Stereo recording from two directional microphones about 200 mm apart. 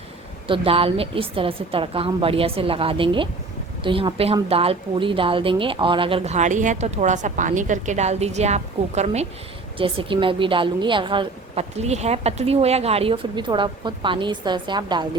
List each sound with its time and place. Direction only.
0.4 s a woman's voice: 25° right (ahead or behind)